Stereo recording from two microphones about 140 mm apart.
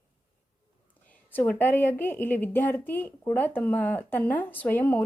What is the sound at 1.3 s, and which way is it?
A woman's voice, 15° left (ahead or behind).